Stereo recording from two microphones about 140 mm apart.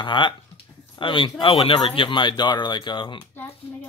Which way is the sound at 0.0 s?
35° left (ahead or behind).